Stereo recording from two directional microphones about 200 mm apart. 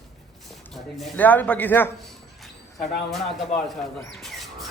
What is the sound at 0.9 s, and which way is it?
Speech, 5° left (ahead or behind).